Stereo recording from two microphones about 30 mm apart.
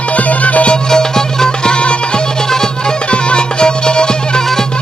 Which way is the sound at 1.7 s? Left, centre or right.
Left.